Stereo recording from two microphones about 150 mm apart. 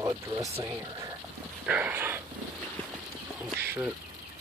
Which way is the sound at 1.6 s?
10° right (ahead or behind).